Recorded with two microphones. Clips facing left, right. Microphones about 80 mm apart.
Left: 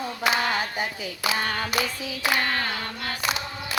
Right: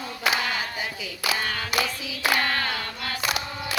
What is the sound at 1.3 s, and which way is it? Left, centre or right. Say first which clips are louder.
Child singing: left 1 dB; left.